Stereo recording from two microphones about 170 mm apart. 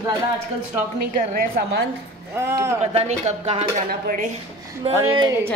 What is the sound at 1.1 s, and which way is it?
Speech, 50° right (ahead or behind).